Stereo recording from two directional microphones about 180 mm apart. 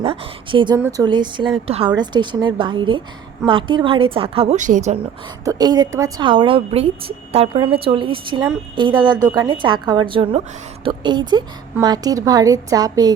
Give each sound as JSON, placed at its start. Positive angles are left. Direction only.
{"t": 0.0, "sound": "a woman's voice", "side_deg": -30}
{"t": 5.5, "sound": "a woman's voice", "side_deg": -20}